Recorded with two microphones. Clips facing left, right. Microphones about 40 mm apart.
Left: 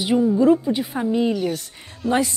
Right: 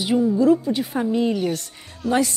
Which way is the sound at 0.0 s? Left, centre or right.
Centre.